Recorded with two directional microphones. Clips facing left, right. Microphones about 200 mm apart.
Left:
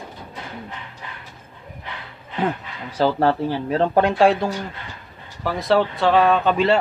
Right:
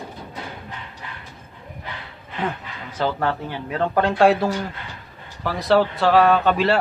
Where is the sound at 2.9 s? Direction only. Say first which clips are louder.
Left 5 dB; 35° left (ahead or behind).